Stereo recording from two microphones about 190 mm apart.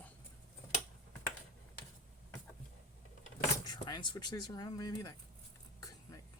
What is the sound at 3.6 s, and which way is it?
Speech, 20° left (ahead or behind).